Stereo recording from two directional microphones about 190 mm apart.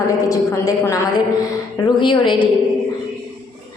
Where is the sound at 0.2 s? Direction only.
20° left (ahead or behind).